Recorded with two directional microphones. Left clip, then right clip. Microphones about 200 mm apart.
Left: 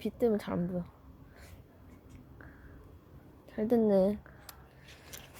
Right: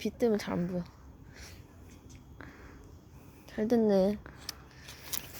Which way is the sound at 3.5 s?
Centre (ahead or behind).